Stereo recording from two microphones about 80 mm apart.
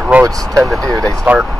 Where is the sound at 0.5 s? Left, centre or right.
Centre.